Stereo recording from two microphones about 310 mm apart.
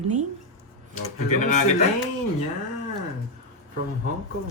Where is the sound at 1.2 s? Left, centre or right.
Left.